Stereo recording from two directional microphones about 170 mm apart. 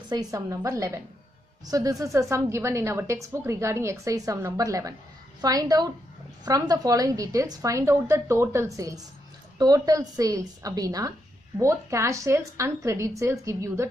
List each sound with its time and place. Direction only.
0.1 s a woman's voice: 20° right (ahead or behind)